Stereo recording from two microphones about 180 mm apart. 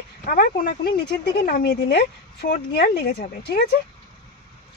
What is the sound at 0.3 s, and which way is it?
Speech, 50° left (ahead or behind).